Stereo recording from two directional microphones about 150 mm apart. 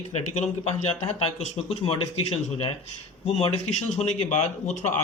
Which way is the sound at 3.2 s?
45° left (ahead or behind).